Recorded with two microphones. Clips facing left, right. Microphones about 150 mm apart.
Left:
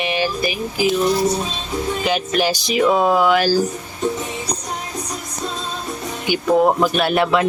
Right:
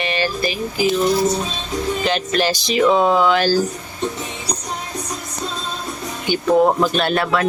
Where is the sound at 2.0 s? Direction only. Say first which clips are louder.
Left 1 dB; 10° left (ahead or behind).